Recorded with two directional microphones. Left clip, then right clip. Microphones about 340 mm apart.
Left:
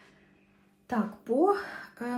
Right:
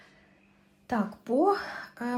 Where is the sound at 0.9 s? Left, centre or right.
Right.